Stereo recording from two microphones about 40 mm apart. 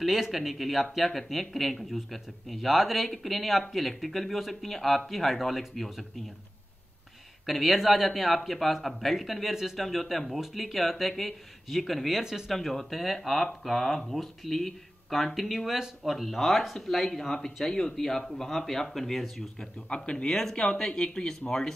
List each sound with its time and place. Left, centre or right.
0.0 s speech: centre
7.4 s speech: centre
12.2 s speech: centre
12.4 s speech: centre
19.9 s speech: left
20.2 s speech: centre